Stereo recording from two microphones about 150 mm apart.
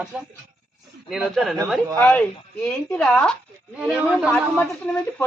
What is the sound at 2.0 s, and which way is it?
Speech, 10° left (ahead or behind).